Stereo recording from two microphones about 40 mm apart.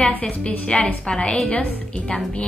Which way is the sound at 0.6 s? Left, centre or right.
Left.